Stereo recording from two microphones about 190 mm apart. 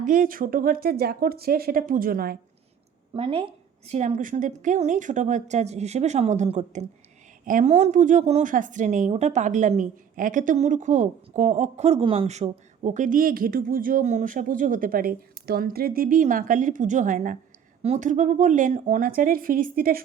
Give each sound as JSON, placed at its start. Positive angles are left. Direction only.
{"t": 0.0, "sound": "speech", "side_deg": -45}
{"t": 3.2, "sound": "a woman's voice", "side_deg": -30}